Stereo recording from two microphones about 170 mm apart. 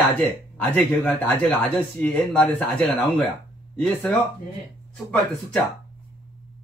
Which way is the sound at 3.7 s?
5° left (ahead or behind).